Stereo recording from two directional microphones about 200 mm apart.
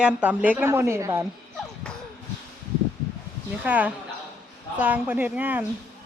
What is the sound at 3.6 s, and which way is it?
A woman's voice, 5° right (ahead or behind).